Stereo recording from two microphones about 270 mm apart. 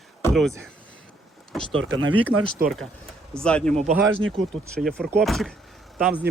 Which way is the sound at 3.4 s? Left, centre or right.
Centre.